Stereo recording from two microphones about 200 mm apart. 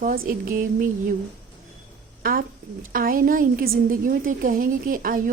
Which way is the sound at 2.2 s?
45° right (ahead or behind).